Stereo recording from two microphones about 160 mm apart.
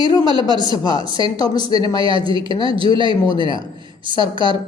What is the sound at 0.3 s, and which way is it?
A man's voice, 25° right (ahead or behind).